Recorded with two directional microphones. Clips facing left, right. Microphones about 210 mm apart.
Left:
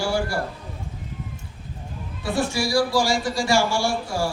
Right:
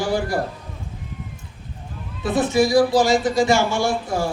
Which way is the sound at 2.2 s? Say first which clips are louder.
Right 6 dB; 20° right (ahead or behind).